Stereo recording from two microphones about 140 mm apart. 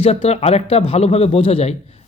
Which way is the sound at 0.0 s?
45° left (ahead or behind).